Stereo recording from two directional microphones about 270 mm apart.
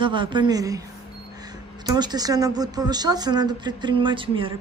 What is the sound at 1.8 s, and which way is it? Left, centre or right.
Speech, centre.